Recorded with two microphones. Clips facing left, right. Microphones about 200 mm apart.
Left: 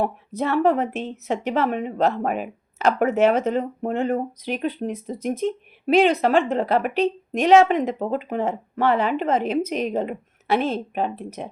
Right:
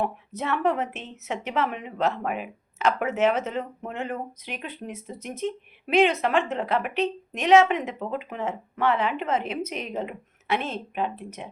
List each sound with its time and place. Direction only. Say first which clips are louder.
0.3 s speech: left 6 dB; 35° left (ahead or behind)